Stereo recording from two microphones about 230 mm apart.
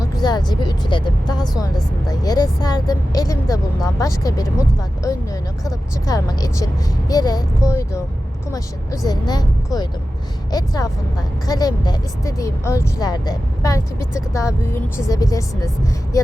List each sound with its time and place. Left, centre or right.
0.0 s speech: centre